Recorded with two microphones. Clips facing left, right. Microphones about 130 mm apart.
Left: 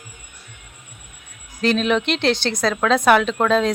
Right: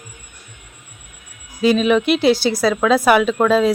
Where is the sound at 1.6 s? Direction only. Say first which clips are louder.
Right 4 dB; 5° right (ahead or behind).